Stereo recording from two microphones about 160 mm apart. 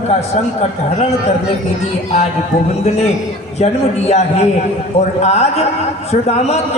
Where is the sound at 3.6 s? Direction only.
40° left (ahead or behind).